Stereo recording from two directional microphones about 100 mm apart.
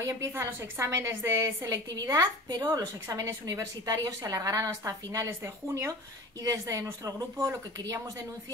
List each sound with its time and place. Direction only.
0.0 s a woman's voice: 25° right (ahead or behind)